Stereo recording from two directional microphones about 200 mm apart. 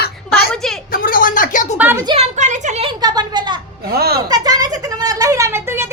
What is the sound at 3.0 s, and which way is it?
Speech, 20° right (ahead or behind).